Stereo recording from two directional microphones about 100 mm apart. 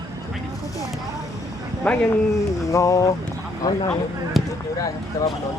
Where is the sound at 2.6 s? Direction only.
30° left (ahead or behind).